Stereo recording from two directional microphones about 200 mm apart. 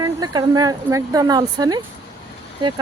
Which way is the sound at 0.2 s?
20° right (ahead or behind).